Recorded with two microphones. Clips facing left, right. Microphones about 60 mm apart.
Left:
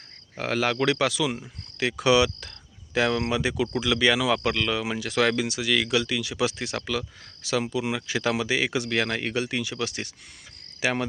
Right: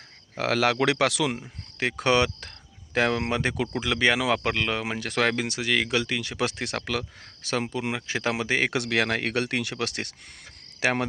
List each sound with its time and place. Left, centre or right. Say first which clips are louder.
0.3 s speech: right 2 dB; right
1.4 s speech: left 1 dB; right
7.4 s speech: left 2 dB; right
8.7 s speech: right 1 dB; right